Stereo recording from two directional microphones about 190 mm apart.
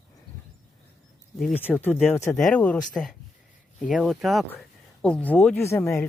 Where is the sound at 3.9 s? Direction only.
Centre (ahead or behind).